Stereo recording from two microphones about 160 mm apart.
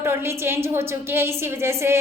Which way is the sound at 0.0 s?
15° right (ahead or behind).